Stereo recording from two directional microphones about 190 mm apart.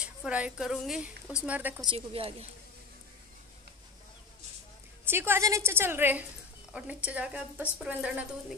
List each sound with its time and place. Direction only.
0.0 s a woman's voice: 5° right (ahead or behind)
1.8 s a woman's voice: 25° right (ahead or behind)
5.0 s a woman's voice: 10° right (ahead or behind)